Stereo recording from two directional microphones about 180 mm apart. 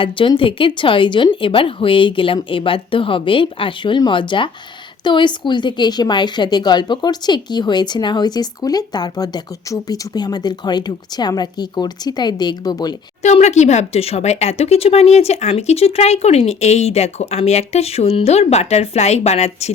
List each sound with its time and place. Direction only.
0.0 s a woman's voice: 30° left (ahead or behind)
13.2 s speech: 40° left (ahead or behind)